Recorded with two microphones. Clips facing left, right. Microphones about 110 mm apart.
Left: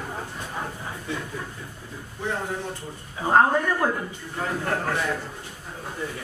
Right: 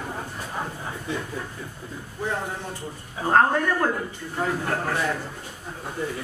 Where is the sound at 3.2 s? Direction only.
10° left (ahead or behind).